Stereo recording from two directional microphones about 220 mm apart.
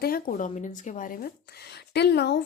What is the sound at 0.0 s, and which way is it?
Speech, 40° left (ahead or behind).